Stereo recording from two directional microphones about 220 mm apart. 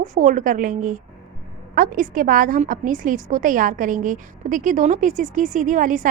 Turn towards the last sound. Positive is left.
turn(degrees=-35)  # may be behind; listen again after turning